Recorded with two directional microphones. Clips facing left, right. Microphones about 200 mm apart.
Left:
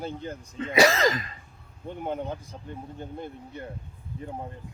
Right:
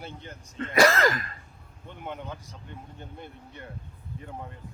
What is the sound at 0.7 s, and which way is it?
Throat clearing, 15° left (ahead or behind).